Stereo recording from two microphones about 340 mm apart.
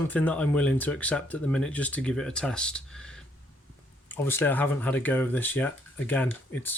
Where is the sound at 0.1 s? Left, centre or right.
Centre.